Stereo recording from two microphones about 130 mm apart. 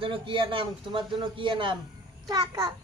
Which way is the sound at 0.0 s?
40° right (ahead or behind).